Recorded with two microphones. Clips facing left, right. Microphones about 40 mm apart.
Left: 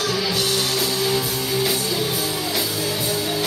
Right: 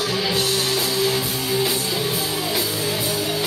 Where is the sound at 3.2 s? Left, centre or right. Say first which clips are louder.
Even; right.